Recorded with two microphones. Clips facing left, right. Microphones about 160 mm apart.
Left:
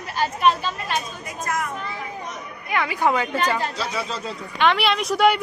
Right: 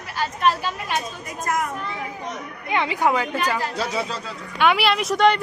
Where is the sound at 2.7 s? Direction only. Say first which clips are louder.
Right 1 dB; 25° right (ahead or behind).